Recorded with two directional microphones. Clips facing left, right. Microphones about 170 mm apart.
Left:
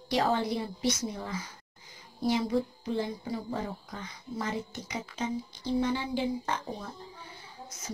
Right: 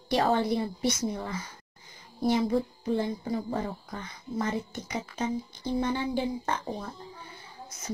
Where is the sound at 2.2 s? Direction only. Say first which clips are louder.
Right 2 dB; 50° right (ahead or behind).